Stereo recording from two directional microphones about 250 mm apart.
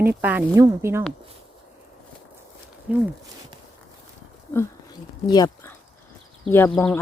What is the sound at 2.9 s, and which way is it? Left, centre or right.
Speech, centre.